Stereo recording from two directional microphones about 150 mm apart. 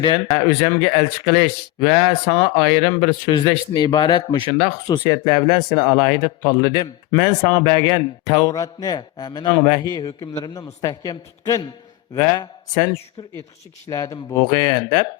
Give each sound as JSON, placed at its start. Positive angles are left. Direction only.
{"t": 0.0, "sound": "speech", "side_deg": 30}